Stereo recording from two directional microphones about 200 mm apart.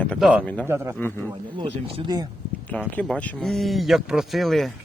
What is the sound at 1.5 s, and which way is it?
Speech, 25° right (ahead or behind).